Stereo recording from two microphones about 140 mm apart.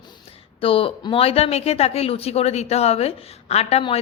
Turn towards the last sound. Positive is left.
turn(degrees=50)  # may be behind; listen again after turning